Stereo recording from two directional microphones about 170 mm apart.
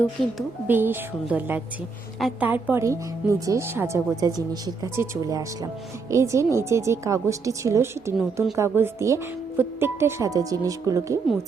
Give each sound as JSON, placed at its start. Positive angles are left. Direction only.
{"t": 0.3, "sound": "a woman's voice", "side_deg": -10}
{"t": 2.1, "sound": "a woman's voice", "side_deg": 0}
{"t": 2.5, "sound": "a woman's voice", "side_deg": -15}